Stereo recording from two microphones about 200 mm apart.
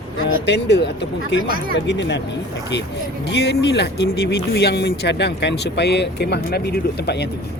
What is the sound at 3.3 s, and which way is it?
Speech, 60° left (ahead or behind).